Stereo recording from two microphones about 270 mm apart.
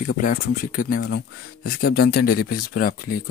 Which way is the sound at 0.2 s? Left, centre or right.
Left.